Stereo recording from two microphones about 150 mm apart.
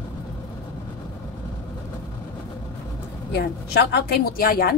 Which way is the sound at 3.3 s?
90° left.